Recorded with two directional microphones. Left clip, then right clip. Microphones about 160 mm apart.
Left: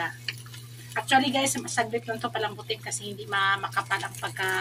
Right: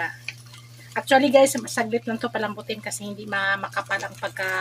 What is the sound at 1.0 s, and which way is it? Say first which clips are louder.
Speech: right 7 dB; 70° right (ahead or behind).